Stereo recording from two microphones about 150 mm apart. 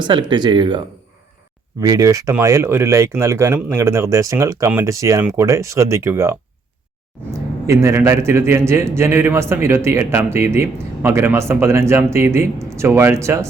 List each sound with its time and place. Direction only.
0.0 s speech: 30° right (ahead or behind)
1.8 s a man's voice: 20° right (ahead or behind)